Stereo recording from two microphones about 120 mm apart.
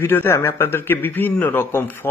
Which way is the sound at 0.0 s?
20° left (ahead or behind).